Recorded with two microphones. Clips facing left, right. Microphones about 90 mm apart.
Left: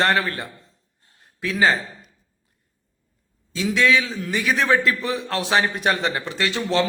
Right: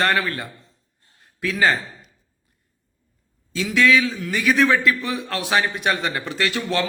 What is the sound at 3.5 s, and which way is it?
A man's voice, 20° left (ahead or behind).